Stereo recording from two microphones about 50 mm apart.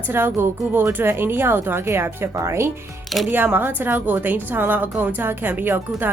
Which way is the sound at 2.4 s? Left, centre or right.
Right.